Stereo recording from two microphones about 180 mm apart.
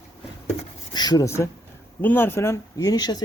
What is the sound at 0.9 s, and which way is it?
Speech, 20° left (ahead or behind).